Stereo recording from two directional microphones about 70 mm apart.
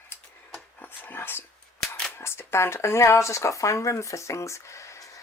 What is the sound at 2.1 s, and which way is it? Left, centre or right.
Speech, left.